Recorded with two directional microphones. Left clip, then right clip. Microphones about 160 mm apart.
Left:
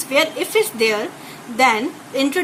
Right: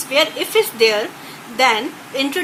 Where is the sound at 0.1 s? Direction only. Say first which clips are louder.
Right 1 dB; 70° left (ahead or behind).